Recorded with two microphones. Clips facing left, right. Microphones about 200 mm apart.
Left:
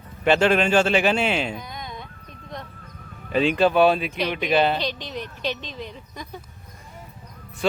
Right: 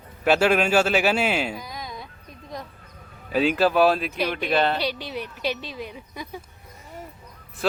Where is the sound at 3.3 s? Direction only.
5° right (ahead or behind).